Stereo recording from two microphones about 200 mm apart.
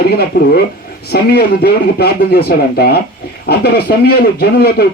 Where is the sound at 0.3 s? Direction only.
50° left (ahead or behind).